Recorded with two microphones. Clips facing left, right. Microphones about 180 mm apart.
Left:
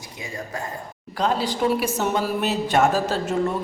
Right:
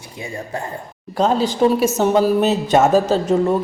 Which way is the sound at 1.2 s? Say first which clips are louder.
Right 6 dB; 25° right (ahead or behind).